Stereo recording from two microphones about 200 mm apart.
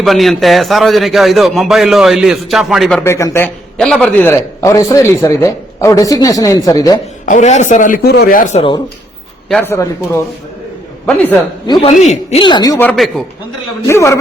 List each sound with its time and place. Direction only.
0.0 s a man's voice: centre (ahead or behind)
3.0 s a man's voice: 15° left (ahead or behind)
3.8 s a man's voice: 5° left (ahead or behind)
7.3 s speech: 35° left (ahead or behind)
9.5 s a man's voice: 10° left (ahead or behind)
11.6 s speech: 20° left (ahead or behind)
12.8 s a man's voice: 5° left (ahead or behind)